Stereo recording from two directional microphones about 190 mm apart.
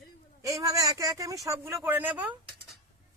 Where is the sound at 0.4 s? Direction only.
15° right (ahead or behind).